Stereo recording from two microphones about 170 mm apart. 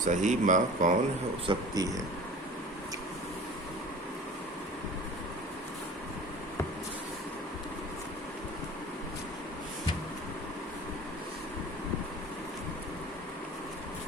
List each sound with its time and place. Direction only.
0.0 s speech: 45° right (ahead or behind)
1.5 s speech: 20° right (ahead or behind)